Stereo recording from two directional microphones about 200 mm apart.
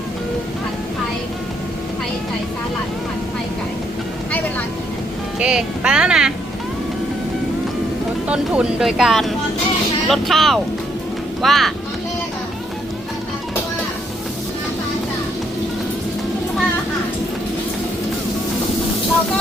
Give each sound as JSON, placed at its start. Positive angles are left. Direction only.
{"t": 5.4, "sound": "speech", "side_deg": -5}
{"t": 8.3, "sound": "speech", "side_deg": -5}